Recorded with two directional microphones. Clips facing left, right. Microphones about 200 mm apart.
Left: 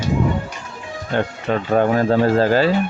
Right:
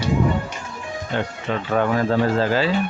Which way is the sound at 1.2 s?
40° left (ahead or behind).